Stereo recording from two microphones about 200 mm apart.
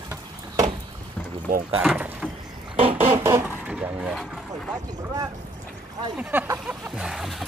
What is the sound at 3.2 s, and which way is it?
Vehicle, 10° right (ahead or behind).